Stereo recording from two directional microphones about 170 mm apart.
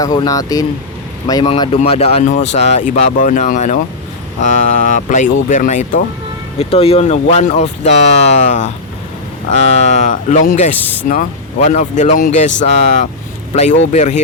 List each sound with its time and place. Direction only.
0.0 s speech: 20° left (ahead or behind)
1.5 s speech: 30° left (ahead or behind); by 6.0 s 50° left (ahead or behind)
6.6 s speech: 35° left (ahead or behind)
13.5 s speech: 40° left (ahead or behind)